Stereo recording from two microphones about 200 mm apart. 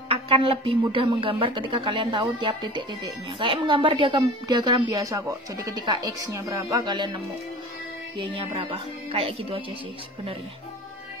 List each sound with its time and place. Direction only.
0.1 s a woman's voice: 25° right (ahead or behind)
8.2 s a woman's voice: 25° right (ahead or behind)